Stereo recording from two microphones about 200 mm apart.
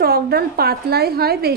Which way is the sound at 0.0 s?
50° right (ahead or behind).